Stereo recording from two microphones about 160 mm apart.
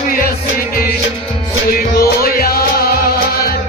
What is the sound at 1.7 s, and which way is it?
Music, 70° left (ahead or behind).